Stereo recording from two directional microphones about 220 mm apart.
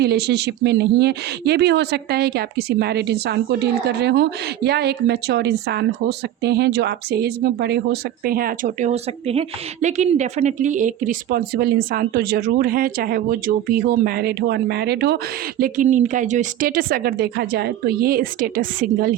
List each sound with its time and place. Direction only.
0.0 s a woman's voice: 45° right (ahead or behind)